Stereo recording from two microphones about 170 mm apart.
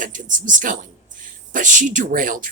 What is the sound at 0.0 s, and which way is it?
Speech, 50° right (ahead or behind).